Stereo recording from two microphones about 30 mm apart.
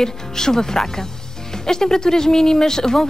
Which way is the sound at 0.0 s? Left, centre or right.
Centre.